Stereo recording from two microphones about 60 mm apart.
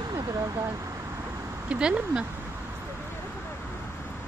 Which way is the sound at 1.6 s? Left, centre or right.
Centre.